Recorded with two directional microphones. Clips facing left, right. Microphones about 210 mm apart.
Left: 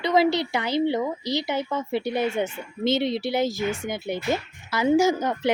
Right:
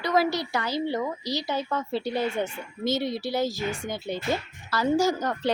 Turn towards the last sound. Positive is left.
turn(degrees=20)  # may be behind; listen again after turning